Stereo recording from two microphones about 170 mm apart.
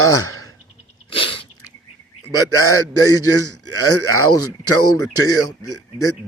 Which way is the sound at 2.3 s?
20° left (ahead or behind).